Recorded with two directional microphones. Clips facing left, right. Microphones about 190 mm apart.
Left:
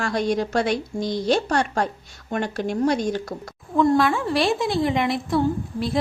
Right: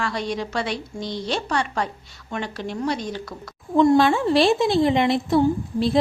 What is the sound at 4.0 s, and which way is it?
A woman's voice, 25° right (ahead or behind).